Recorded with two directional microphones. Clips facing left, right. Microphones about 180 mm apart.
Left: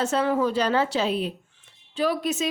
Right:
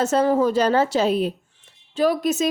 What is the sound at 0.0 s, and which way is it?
A woman's voice, 40° right (ahead or behind).